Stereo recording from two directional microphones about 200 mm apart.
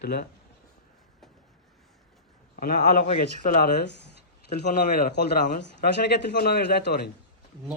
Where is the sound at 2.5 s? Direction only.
45° left (ahead or behind).